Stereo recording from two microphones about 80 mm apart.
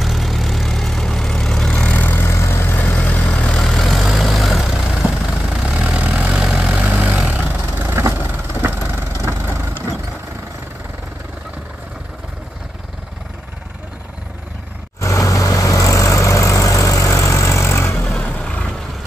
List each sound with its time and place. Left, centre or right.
0.0 s vehicle: centre; by 2.2 s left
2.2 s vehicle: left; by 3.5 s centre
3.5 s vehicle: centre; by 9.5 s right
15.0 s vehicle: left
18.2 s vehicle: centre